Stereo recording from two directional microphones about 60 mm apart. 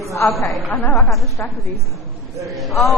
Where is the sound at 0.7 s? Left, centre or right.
Left.